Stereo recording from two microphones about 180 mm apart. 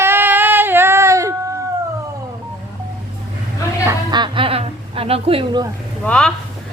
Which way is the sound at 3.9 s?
25° right (ahead or behind).